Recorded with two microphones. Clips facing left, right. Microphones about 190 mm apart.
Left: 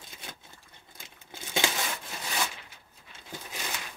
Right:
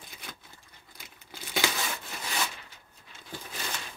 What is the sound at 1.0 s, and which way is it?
Tearing, 25° left (ahead or behind).